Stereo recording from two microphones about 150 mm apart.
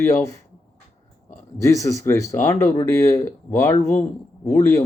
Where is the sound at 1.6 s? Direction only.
20° left (ahead or behind).